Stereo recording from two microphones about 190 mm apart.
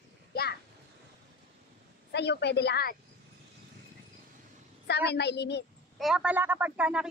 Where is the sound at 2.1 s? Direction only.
60° left (ahead or behind).